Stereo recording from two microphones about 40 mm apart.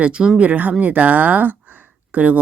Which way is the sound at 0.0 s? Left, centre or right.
Right.